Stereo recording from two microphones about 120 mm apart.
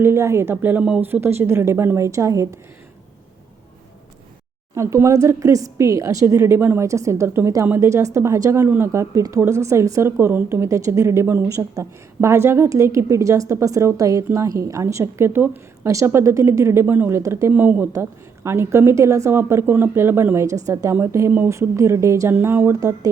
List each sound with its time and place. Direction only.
0.0 s a woman's voice: 20° right (ahead or behind)
4.7 s a woman's voice: 25° right (ahead or behind)
17.5 s a woman's voice: 15° right (ahead or behind)